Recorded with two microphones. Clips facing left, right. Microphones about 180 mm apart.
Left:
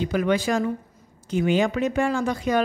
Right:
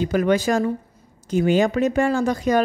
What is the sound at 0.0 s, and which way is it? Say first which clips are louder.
A woman's voice: right 3 dB; 45° right (ahead or behind).